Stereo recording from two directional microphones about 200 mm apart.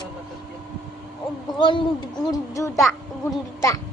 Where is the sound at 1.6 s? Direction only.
25° left (ahead or behind).